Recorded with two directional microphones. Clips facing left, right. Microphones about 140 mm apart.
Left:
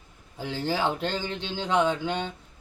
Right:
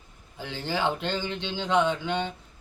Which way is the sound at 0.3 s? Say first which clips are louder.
Left 2 dB; 40° left (ahead or behind).